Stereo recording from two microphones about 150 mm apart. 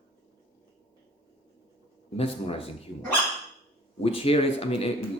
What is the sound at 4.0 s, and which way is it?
Speech, 40° left (ahead or behind).